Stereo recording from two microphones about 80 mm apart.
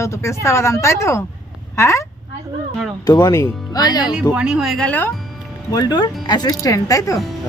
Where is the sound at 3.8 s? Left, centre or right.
Left.